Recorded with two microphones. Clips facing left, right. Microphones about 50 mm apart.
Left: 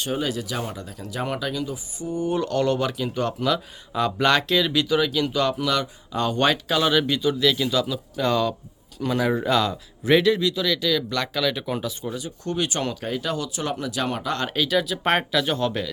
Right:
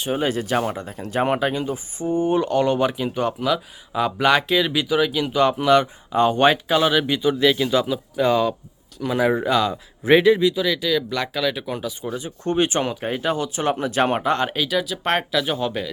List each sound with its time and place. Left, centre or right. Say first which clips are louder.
0.2 s speech: right 6 dB; right; by 9.7 s centre
9.7 s speech: right 3 dB; right; by 11.9 s centre
12.1 s speech: right 5 dB; right
14.5 s speech: even; centre